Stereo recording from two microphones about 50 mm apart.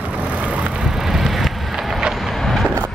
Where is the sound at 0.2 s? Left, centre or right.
Right.